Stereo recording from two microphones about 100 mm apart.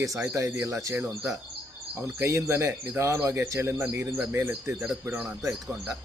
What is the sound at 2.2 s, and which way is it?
Speech, 30° right (ahead or behind).